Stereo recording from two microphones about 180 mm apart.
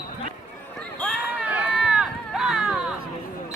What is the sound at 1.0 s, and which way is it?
Run, centre (ahead or behind).